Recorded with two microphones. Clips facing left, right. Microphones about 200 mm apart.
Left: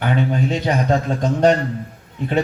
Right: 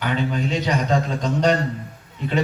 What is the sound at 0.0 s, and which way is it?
A man's voice, 50° left (ahead or behind).